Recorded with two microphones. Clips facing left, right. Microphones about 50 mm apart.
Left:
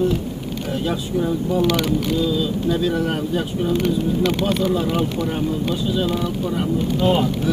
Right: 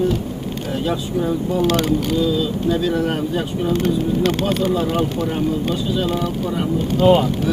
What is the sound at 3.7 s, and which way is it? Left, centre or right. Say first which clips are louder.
Speech: right 1 dB; right.